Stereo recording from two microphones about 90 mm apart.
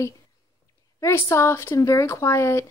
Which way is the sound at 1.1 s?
30° left (ahead or behind).